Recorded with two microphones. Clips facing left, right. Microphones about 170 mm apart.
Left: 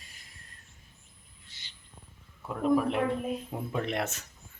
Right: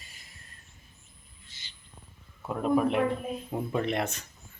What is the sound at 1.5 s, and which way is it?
Owl, 60° left (ahead or behind).